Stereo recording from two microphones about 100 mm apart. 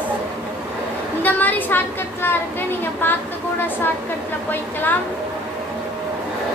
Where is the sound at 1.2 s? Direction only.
20° left (ahead or behind).